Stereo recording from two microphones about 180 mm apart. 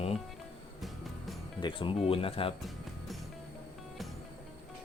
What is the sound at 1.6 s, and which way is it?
Speech, 30° left (ahead or behind).